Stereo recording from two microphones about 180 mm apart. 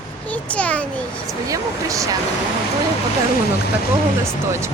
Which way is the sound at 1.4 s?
20° right (ahead or behind).